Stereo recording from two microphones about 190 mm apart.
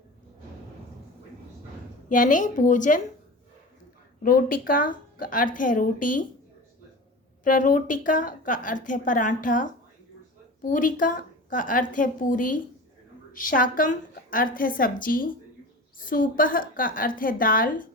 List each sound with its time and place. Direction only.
2.0 s a woman's voice: 45° left (ahead or behind)
4.2 s a woman's voice: 50° left (ahead or behind)
7.4 s a woman's voice: 45° left (ahead or behind)